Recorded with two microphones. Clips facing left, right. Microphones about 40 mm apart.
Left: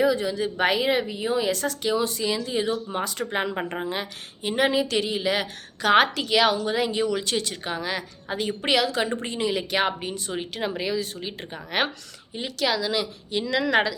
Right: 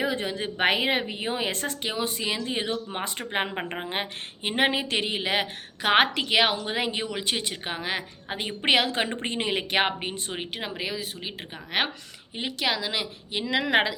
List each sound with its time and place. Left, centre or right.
0.0 s speech: right
10.6 s speech: centre
12.3 s speech: right